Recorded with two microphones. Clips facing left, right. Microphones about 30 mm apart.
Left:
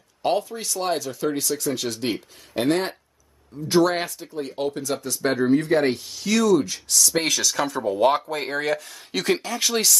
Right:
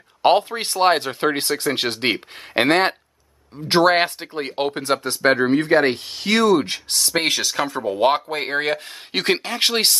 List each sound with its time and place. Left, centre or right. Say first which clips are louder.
0.2 s speech: right 7 dB; right